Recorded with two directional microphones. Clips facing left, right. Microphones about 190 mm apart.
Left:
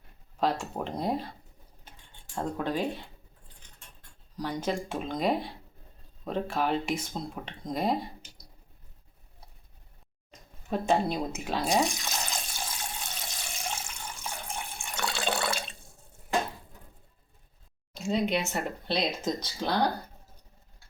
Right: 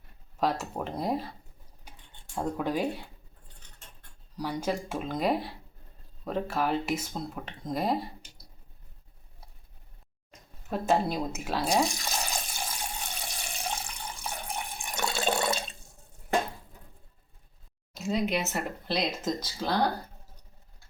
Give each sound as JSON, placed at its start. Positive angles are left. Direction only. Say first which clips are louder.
{"t": 0.6, "sound": "speech", "louder": "even", "side_deg": -5}
{"t": 2.3, "sound": "speech", "louder": "right 1 dB", "side_deg": -10}
{"t": 4.4, "sound": "speech", "louder": "even", "side_deg": -10}
{"t": 10.7, "sound": "water", "louder": "even", "side_deg": 0}
{"t": 17.9, "sound": "speech", "louder": "left 1 dB", "side_deg": -5}